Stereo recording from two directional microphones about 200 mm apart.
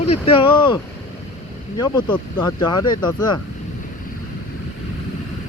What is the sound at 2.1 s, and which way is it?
Speech, 10° left (ahead or behind).